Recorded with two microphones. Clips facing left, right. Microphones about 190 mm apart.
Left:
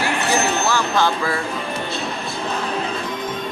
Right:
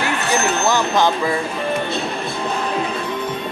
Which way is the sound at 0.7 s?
20° right (ahead or behind).